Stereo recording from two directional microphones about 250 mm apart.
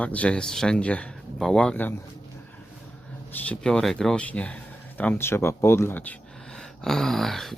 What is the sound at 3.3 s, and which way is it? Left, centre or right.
Speech, centre.